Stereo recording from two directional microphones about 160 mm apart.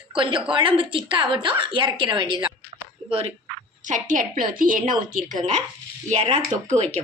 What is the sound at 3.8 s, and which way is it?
A woman's voice, 55° right (ahead or behind).